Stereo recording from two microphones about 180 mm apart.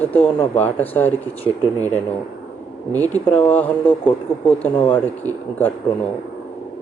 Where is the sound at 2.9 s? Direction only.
10° left (ahead or behind).